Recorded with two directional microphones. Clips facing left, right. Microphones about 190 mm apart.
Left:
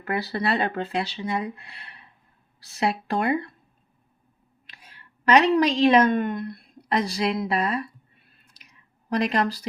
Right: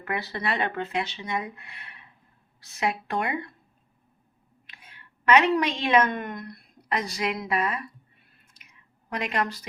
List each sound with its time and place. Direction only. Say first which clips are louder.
0.0 s speech: left 4 dB; 35° left (ahead or behind)
4.6 s a woman's voice: left 1 dB; 35° left (ahead or behind)
9.0 s speech: left 5 dB; 35° left (ahead or behind)